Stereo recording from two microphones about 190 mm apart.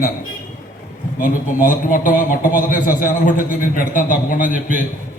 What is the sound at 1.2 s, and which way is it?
A man's voice, 45° left (ahead or behind).